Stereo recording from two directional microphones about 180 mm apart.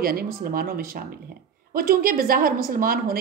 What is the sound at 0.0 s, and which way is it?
A woman's voice, 55° right (ahead or behind).